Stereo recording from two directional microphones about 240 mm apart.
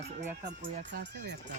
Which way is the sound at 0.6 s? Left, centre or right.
Right.